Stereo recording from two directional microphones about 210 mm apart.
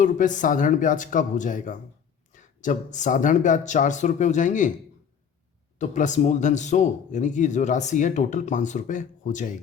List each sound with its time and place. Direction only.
0.0 s speech: 35° left (ahead or behind)
5.8 s speech: 35° left (ahead or behind)